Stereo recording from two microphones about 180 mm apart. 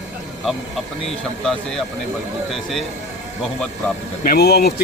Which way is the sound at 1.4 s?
5° left (ahead or behind).